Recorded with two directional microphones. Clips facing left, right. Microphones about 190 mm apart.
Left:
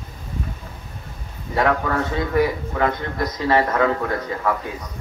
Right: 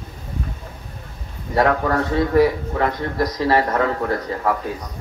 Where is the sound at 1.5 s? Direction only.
35° right (ahead or behind).